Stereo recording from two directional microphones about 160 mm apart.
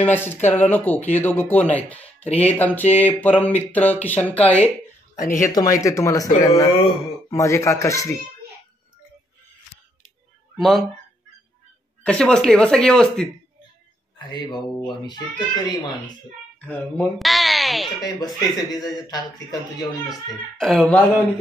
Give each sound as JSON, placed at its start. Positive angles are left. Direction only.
{"t": 0.0, "sound": "speech", "side_deg": 15}
{"t": 5.1, "sound": "speech", "side_deg": 55}
{"t": 5.8, "sound": "speech", "side_deg": 20}
{"t": 10.6, "sound": "speech", "side_deg": 0}
{"t": 12.0, "sound": "speech", "side_deg": 5}
{"t": 14.1, "sound": "speech", "side_deg": 25}
{"t": 16.6, "sound": "music", "side_deg": 10}
{"t": 18.0, "sound": "speech", "side_deg": 25}
{"t": 20.5, "sound": "speech", "side_deg": 5}